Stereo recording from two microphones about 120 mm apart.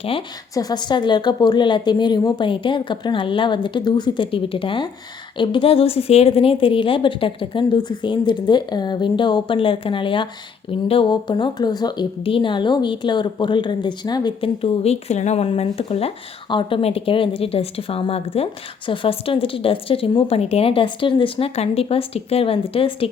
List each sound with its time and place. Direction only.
0.0 s a woman's voice: 50° left (ahead or behind)
0.5 s a woman's voice: 35° left (ahead or behind)
14.6 s speech: 60° left (ahead or behind)
15.4 s a woman's voice: 50° left (ahead or behind)